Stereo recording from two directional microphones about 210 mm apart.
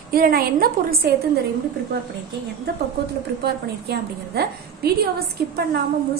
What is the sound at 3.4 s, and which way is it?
A woman's voice, 50° right (ahead or behind).